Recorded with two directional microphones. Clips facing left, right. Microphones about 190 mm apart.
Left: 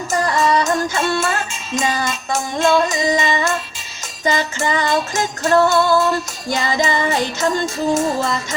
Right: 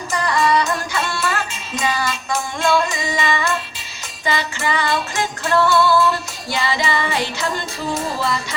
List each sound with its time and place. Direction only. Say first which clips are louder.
0.1 s music: left 1 dB; 45° left (ahead or behind)